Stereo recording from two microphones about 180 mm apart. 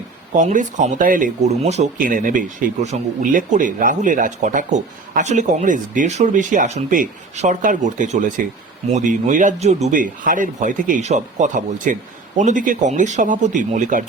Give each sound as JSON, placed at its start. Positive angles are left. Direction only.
{"t": 0.3, "sound": "speech", "side_deg": -45}